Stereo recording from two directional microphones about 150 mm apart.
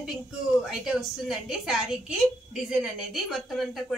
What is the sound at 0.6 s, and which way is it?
A woman's voice, 5° right (ahead or behind).